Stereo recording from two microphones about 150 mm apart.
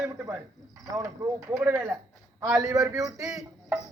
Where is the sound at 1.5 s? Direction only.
15° right (ahead or behind).